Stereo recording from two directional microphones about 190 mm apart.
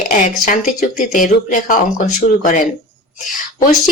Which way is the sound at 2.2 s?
55° left (ahead or behind).